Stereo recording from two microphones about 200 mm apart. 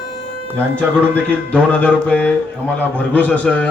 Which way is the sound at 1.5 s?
5° left (ahead or behind).